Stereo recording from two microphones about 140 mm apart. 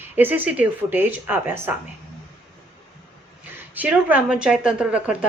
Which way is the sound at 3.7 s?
10° right (ahead or behind).